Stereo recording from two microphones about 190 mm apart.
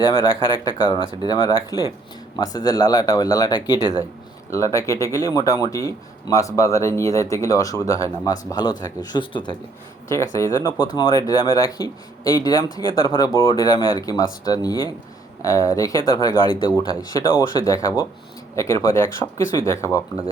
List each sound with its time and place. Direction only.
0.0 s a man's voice: 25° left (ahead or behind)